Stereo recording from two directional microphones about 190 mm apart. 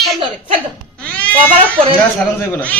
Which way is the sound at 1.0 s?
5° left (ahead or behind).